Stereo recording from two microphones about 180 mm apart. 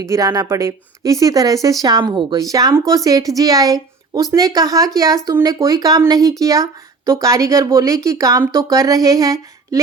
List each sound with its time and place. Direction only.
0.0 s a woman's voice: 20° right (ahead or behind)